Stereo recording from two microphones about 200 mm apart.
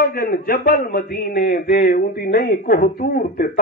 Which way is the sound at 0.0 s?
50° left (ahead or behind).